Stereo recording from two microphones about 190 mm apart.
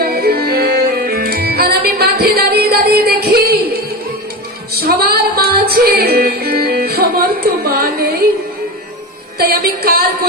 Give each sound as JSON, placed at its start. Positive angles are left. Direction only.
{"t": 0.0, "sound": "music", "side_deg": -55}
{"t": 4.7, "sound": "music", "side_deg": -55}
{"t": 9.4, "sound": "music", "side_deg": -50}